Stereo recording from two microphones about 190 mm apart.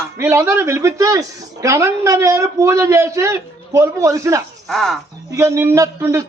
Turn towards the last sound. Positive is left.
turn(degrees=-15)  # may be behind; listen again after turning